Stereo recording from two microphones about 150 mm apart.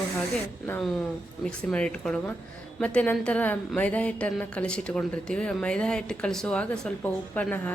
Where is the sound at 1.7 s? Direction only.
10° left (ahead or behind).